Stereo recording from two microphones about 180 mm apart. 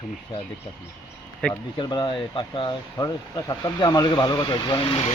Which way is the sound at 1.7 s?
25° left (ahead or behind).